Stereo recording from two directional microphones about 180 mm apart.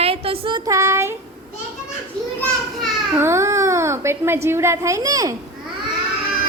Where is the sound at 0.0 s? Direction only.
30° right (ahead or behind); by 1.1 s 15° right (ahead or behind).